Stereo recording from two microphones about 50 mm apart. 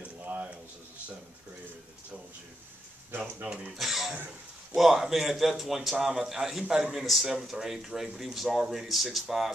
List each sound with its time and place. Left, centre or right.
3.4 s speech: right
3.7 s a man's voice: centre